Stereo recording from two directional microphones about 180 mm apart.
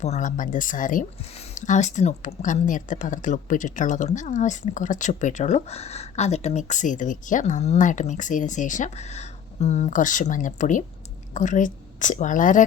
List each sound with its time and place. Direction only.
0.0 s speech: 40° left (ahead or behind)